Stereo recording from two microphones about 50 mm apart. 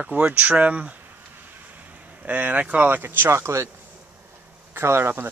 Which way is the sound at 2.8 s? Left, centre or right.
Right.